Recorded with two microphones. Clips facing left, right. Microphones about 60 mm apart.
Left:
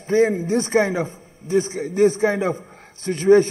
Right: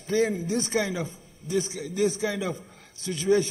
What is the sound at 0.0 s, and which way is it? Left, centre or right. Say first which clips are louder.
A man's voice: left 7 dB; left.